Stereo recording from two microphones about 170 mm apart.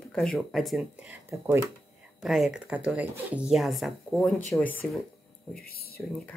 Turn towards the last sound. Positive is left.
turn(degrees=10)  # may be behind; listen again after turning